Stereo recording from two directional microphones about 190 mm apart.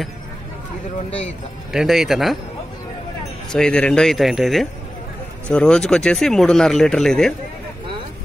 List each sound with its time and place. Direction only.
1.7 s speech: centre (ahead or behind)
3.5 s speech: 5° left (ahead or behind)